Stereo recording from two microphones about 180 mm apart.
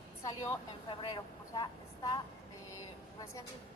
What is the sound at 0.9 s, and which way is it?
Speech, 25° left (ahead or behind).